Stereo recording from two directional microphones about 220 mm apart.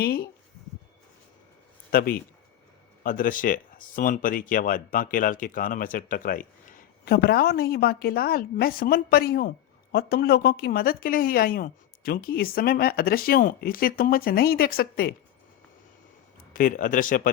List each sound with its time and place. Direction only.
1.9 s speech: 40° left (ahead or behind)
16.5 s speech: 40° left (ahead or behind)